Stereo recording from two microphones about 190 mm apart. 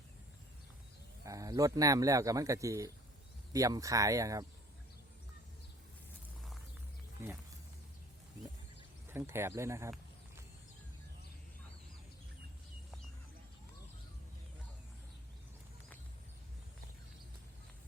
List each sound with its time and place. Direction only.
1.2 s a man's voice: 15° right (ahead or behind)
9.1 s a man's voice: 15° right (ahead or behind)